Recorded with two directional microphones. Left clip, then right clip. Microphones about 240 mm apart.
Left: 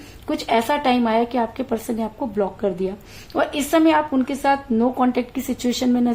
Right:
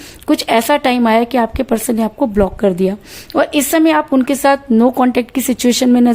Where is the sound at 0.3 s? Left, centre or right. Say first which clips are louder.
Right 7 dB; right.